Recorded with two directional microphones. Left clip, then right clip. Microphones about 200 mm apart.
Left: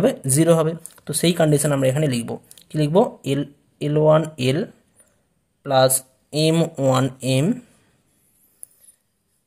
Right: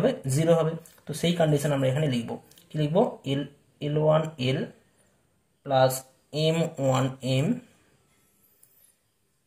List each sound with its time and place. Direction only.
0.0 s speech: 50° left (ahead or behind)